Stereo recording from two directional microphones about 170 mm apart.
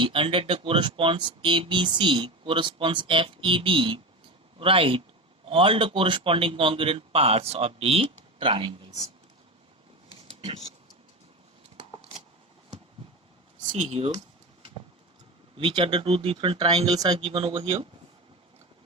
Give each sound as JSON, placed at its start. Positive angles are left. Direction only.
{"t": 0.0, "sound": "a man's voice", "side_deg": -30}
{"t": 10.4, "sound": "a man's voice", "side_deg": -35}
{"t": 13.6, "sound": "speech", "side_deg": -40}
{"t": 15.5, "sound": "a man's voice", "side_deg": -30}